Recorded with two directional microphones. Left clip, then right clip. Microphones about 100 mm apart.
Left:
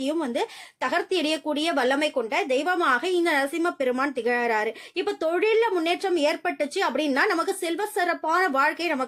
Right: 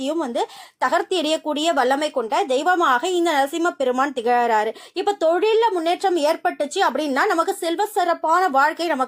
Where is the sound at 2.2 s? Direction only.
20° right (ahead or behind); by 6.1 s centre (ahead or behind).